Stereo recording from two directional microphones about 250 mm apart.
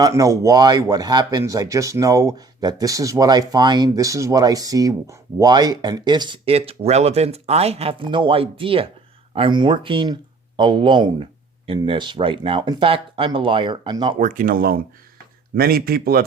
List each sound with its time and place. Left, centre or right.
0.0 s speech: centre; by 16.2 s right